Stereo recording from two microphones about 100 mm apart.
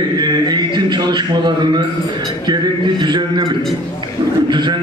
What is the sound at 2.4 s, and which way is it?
A man's voice, 45° right (ahead or behind).